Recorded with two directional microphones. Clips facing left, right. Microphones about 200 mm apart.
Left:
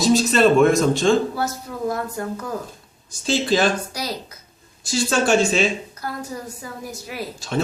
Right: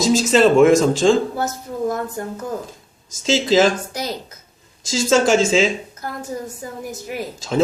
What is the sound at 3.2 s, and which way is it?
Speech, 90° right.